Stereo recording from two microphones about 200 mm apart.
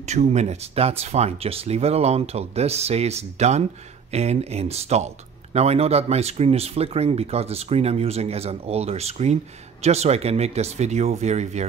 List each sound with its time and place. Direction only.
0.0 s speech: 35° right (ahead or behind)